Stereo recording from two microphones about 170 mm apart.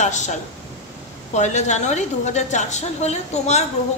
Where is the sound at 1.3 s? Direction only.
45° left (ahead or behind).